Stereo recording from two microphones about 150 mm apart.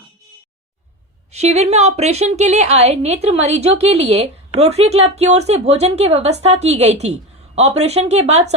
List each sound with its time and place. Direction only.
1.3 s a woman's voice: 45° right (ahead or behind)